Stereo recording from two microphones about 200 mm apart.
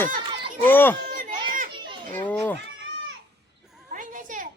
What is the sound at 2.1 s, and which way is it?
Cat, 10° left (ahead or behind).